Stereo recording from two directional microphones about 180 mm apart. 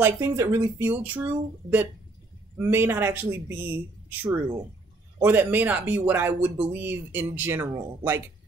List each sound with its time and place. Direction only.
0.0 s speech: 15° right (ahead or behind)